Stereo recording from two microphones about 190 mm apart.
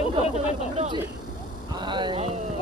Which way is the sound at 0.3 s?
35° right (ahead or behind).